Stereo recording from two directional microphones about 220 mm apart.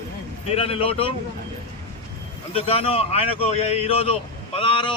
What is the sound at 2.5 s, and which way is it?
A man's voice, 25° left (ahead or behind).